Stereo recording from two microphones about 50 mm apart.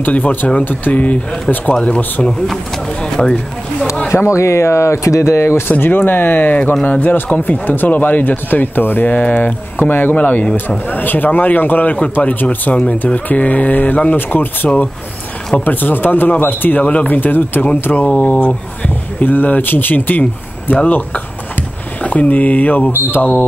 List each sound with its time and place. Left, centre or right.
0.0 s speech: left
3.0 s speech: centre
4.4 s speech: left
5.7 s speech: left
16.8 s speech: left
17.2 s speech: left
17.9 s speech: left
22.8 s mantra: left